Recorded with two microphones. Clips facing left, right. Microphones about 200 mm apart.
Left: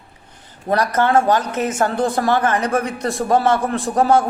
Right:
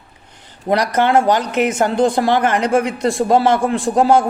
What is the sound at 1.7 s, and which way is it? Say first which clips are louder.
Speech: right 2 dB; 25° right (ahead or behind).